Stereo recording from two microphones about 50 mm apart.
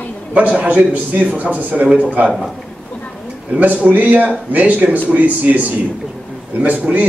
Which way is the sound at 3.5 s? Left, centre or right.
Right.